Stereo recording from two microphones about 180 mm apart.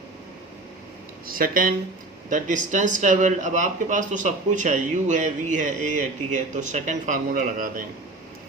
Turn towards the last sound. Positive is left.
turn(degrees=-50)  # may be behind; listen again after turning